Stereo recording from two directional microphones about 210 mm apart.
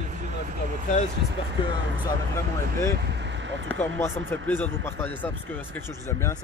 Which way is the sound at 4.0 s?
10° left (ahead or behind).